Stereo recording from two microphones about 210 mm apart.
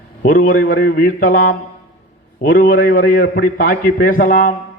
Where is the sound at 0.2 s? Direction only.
40° left (ahead or behind).